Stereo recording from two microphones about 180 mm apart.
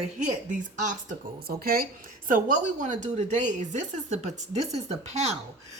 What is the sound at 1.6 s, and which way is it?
A woman's voice, 55° right (ahead or behind).